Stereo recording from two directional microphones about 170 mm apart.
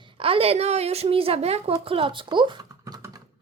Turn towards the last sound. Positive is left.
turn(degrees=-20)  # may be behind; listen again after turning